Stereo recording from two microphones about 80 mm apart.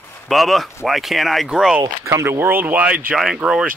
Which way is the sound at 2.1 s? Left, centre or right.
Right.